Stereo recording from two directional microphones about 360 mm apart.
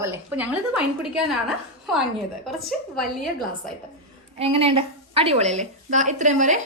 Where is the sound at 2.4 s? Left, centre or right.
Centre.